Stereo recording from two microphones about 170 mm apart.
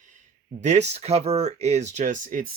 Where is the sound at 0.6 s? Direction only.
40° right (ahead or behind).